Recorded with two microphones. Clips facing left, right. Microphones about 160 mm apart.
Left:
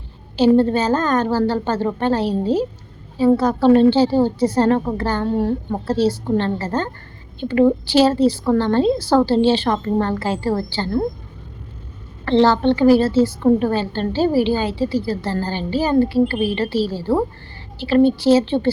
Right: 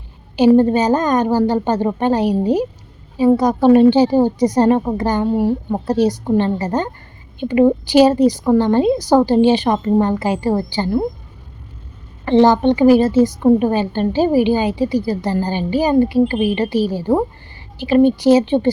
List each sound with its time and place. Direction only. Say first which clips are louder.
0.3 s a woman's voice: right 3 dB; 15° right (ahead or behind)
12.2 s a woman's voice: right 3 dB; 15° right (ahead or behind)